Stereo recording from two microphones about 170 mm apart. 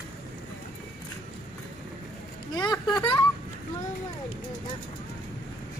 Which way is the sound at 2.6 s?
25° left (ahead or behind).